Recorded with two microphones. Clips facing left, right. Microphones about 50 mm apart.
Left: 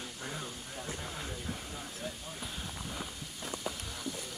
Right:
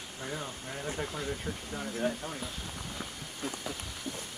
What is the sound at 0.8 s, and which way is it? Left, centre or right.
Speech, right.